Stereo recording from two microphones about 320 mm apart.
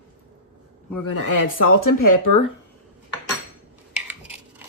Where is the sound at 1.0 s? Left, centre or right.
Left.